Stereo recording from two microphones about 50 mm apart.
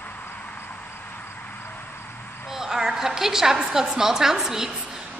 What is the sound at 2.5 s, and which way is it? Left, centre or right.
A woman's voice, centre.